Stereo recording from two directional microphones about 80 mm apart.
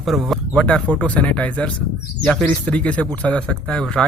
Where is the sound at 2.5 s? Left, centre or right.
Centre.